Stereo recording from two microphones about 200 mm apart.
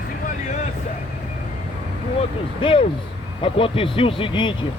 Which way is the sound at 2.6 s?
25° left (ahead or behind).